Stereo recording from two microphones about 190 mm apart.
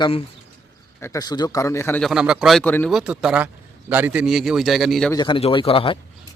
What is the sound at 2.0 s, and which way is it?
Speech, centre (ahead or behind).